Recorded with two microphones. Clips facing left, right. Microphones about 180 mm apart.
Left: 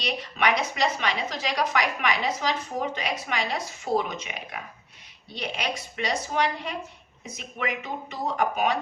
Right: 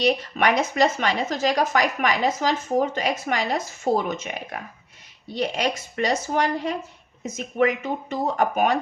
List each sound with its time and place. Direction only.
0.0 s speech: 45° right (ahead or behind)